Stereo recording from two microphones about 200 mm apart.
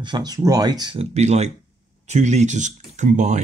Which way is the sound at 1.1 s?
35° right (ahead or behind).